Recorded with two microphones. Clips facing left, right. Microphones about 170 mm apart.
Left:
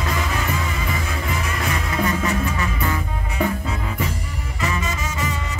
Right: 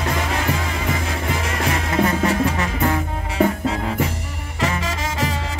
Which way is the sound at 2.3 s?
70° right (ahead or behind).